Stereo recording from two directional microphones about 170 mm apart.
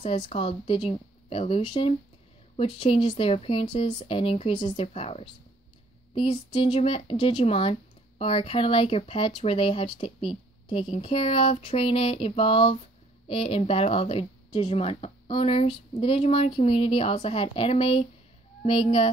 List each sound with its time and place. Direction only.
0.0 s a woman's voice: 35° left (ahead or behind)